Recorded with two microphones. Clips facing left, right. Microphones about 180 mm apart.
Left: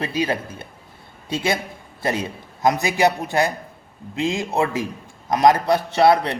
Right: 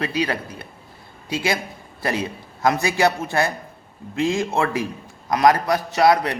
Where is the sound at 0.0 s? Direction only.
25° left (ahead or behind).